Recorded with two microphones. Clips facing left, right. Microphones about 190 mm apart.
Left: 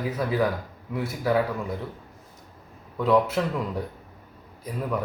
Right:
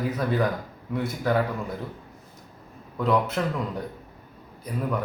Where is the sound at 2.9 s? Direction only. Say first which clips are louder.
Left 2 dB; centre (ahead or behind).